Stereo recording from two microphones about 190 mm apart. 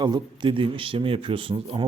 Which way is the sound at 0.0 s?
25° right (ahead or behind).